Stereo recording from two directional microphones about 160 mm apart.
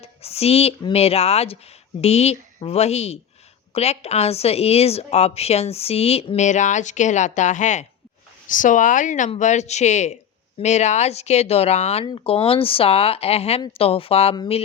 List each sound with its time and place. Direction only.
0.0 s a woman's voice: 40° left (ahead or behind)